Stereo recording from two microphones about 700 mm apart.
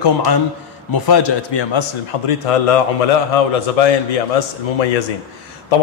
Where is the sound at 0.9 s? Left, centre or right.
Left.